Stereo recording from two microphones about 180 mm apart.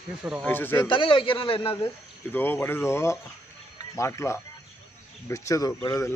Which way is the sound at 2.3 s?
10° left (ahead or behind).